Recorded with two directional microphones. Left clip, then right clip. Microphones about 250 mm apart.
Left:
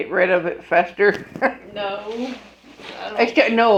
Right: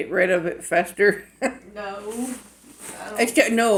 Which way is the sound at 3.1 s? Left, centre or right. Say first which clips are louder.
Left 3 dB; right.